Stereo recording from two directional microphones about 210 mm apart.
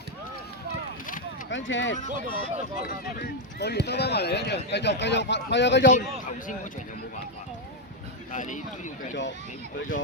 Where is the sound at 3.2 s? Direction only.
50° left (ahead or behind).